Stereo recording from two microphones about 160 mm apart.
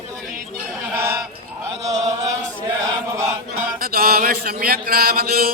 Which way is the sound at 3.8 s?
70° right (ahead or behind).